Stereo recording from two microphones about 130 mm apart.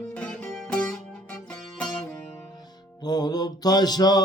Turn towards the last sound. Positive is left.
turn(degrees=30)  # may be behind; listen again after turning